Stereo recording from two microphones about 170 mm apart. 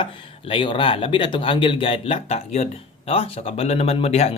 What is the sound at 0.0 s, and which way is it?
Speech, 30° left (ahead or behind).